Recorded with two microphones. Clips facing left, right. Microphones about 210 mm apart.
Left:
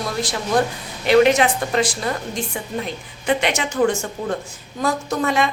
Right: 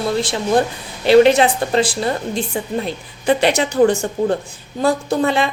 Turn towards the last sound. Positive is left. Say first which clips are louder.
# right 3 dB
turn(degrees=-30)  # may be behind; listen again after turning